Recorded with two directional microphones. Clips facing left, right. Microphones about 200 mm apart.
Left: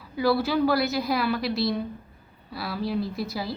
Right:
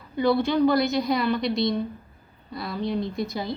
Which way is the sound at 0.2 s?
5° left (ahead or behind).